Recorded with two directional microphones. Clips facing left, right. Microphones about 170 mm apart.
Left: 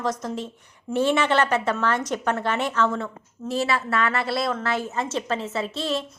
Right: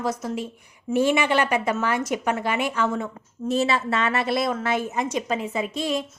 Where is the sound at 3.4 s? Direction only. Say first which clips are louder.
Right 2 dB; 20° right (ahead or behind).